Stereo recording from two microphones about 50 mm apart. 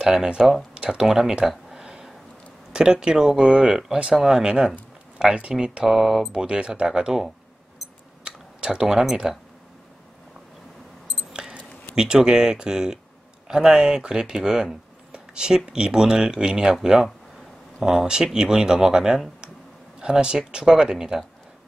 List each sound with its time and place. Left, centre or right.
0.0 s speech: centre
1.7 s a sound: centre
2.7 s speech: centre
6.3 s speech: centre
8.2 s typing: centre
8.9 s speech: centre
11.3 s keys jangling: centre
11.9 s speech: centre